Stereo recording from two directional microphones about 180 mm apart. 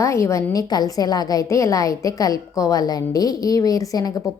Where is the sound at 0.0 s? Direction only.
15° left (ahead or behind).